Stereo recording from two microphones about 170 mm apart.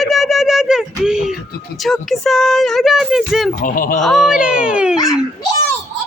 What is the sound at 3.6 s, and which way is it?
Speech, 55° left (ahead or behind).